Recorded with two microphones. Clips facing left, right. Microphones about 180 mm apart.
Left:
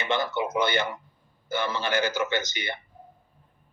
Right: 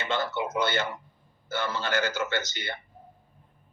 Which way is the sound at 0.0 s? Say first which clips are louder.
Left 2 dB; 15° left (ahead or behind).